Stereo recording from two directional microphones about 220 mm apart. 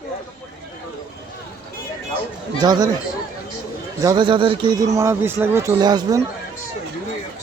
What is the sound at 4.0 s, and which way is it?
A man's voice, 20° right (ahead or behind).